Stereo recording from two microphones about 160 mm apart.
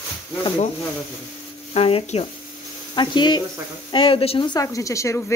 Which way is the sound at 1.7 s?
35° left (ahead or behind).